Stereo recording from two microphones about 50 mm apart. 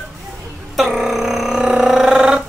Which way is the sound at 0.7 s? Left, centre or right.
Centre.